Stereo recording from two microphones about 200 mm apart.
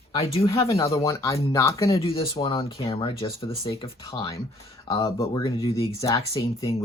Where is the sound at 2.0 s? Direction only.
25° left (ahead or behind).